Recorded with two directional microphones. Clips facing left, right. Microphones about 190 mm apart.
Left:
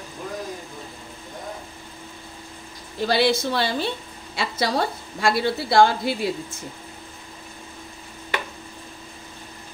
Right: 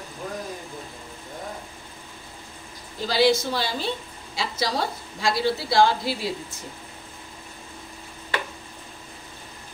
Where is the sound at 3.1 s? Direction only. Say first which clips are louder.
Even; 60° left (ahead or behind).